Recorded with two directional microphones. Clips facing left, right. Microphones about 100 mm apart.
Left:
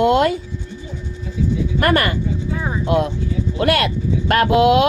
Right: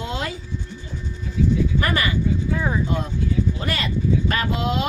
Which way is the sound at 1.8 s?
60° left (ahead or behind).